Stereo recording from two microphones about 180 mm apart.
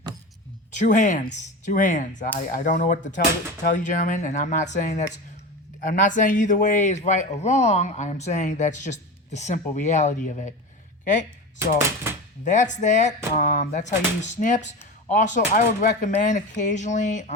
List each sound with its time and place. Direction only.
0.9 s speech: 45° left (ahead or behind)
12.5 s speech: 45° left (ahead or behind)